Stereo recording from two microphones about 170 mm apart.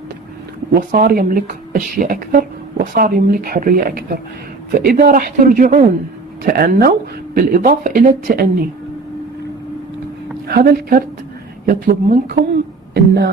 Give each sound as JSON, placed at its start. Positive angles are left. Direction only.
{"t": 0.7, "sound": "speech", "side_deg": -55}
{"t": 4.7, "sound": "speech", "side_deg": -50}
{"t": 10.5, "sound": "speech", "side_deg": -60}
{"t": 12.9, "sound": "speech", "side_deg": -85}